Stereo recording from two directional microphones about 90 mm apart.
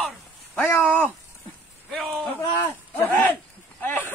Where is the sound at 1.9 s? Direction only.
Centre (ahead or behind).